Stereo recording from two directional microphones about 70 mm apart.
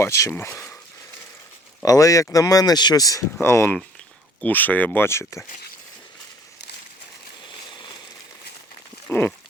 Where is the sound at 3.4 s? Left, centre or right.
Left.